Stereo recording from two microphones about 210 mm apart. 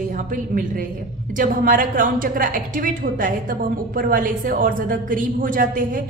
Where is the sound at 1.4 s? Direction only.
40° right (ahead or behind).